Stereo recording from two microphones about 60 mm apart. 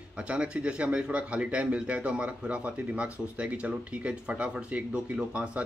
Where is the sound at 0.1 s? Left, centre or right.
Centre.